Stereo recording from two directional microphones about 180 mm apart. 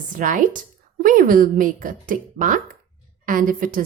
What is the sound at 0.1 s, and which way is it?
A woman's voice, 45° right (ahead or behind).